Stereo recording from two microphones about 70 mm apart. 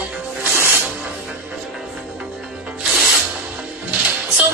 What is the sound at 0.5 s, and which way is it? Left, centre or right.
Music, right.